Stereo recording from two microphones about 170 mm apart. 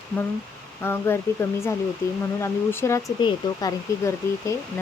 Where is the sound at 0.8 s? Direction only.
15° left (ahead or behind).